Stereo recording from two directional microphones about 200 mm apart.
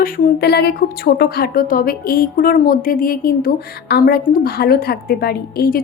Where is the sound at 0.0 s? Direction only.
55° left (ahead or behind).